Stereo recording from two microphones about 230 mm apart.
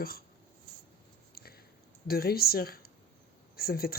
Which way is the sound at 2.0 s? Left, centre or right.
Left.